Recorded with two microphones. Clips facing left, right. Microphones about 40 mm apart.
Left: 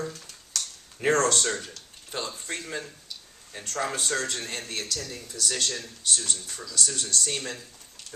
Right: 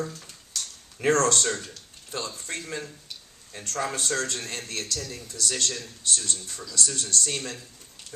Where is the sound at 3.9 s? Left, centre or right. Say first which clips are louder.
Right 1 dB; left.